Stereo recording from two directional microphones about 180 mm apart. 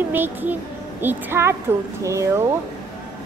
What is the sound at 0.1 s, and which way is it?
Speech, 10° right (ahead or behind).